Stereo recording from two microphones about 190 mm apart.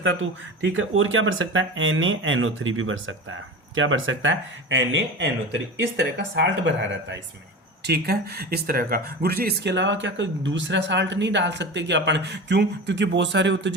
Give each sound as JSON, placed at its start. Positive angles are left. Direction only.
{"t": 0.0, "sound": "speech", "side_deg": -85}
{"t": 7.9, "sound": "speech", "side_deg": -55}